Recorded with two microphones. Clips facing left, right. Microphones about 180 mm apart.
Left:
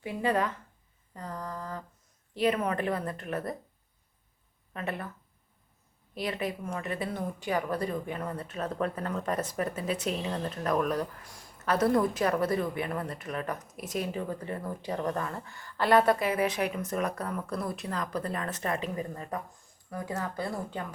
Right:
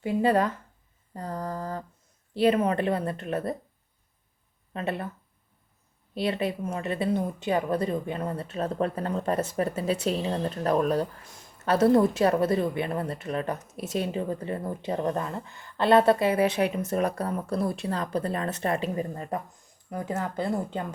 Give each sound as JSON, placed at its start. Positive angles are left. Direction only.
{"t": 0.0, "sound": "mantra", "side_deg": -30}
{"t": 2.3, "sound": "speech", "side_deg": -30}
{"t": 4.7, "sound": "speech", "side_deg": -30}
{"t": 6.1, "sound": "speech", "side_deg": -30}